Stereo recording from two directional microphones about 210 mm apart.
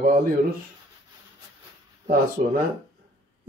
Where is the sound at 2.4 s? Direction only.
30° right (ahead or behind).